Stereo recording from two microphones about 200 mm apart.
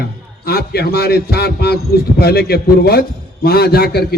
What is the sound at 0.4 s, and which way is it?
A man's voice, 50° left (ahead or behind).